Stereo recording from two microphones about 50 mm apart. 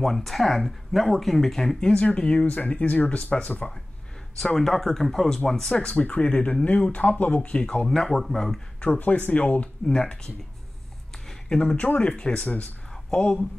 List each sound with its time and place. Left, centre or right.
0.0 s speech: centre
2.1 s speech: left
4.4 s speech: centre
5.9 s speech: left
7.6 s speech: centre
8.8 s speech: left
9.8 s speech: centre
11.2 s a sound: centre
11.7 s speech: left
12.1 s speech: centre